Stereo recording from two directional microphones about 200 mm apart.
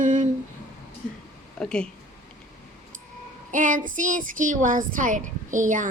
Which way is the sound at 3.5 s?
40° right (ahead or behind).